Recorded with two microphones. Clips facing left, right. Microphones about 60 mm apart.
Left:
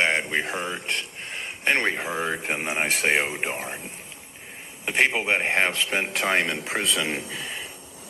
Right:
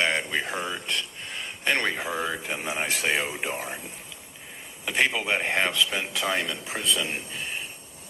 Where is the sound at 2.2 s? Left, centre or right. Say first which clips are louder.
Left 3 dB; left.